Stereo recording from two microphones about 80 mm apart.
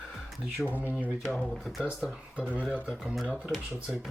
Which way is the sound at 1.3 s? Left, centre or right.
Centre.